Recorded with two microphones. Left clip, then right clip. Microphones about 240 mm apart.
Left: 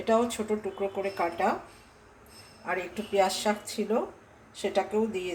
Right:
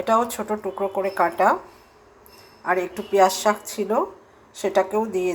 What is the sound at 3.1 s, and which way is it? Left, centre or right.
Speech, centre.